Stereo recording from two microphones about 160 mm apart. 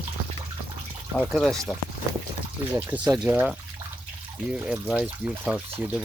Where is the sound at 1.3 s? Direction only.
Centre (ahead or behind).